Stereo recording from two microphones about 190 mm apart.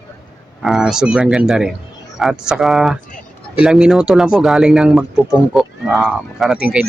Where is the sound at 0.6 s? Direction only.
Centre (ahead or behind).